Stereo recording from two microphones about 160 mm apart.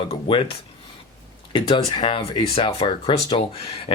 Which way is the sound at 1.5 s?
30° left (ahead or behind).